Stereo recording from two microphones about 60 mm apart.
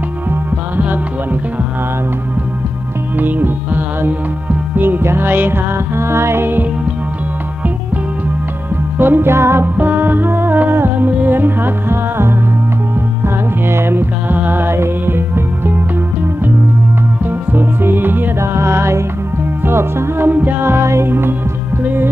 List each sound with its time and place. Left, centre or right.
0.3 s music: right
3.2 s music: right
8.9 s music: right
9.8 s music: right
17.2 s music: right
18.4 s music: right